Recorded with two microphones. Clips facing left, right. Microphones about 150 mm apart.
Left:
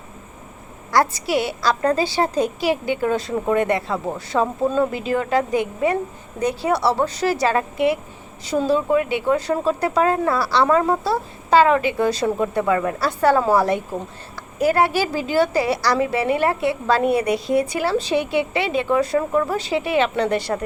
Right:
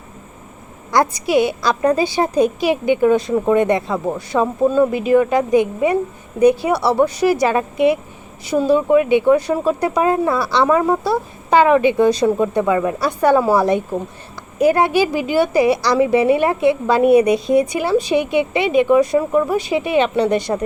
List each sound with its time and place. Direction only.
0.9 s a woman's voice: 20° right (ahead or behind)